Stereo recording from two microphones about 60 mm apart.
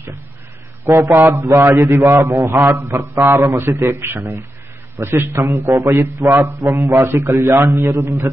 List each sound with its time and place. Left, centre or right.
1.2 s a man's voice: right
7.3 s a man's voice: right